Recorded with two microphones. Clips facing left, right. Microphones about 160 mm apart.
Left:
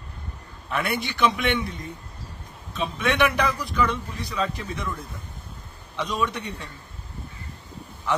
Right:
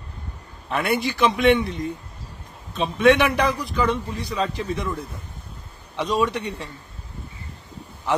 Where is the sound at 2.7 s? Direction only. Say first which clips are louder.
Right 9 dB; 35° right (ahead or behind).